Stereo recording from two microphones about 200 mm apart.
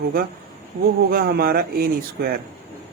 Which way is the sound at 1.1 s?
50° right (ahead or behind).